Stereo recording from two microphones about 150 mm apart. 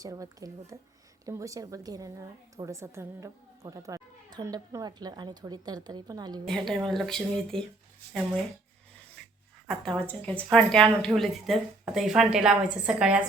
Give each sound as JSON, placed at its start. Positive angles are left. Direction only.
{"t": 0.0, "sound": "speech", "side_deg": -20}
{"t": 6.4, "sound": "speech", "side_deg": 0}
{"t": 9.6, "sound": "speech", "side_deg": 5}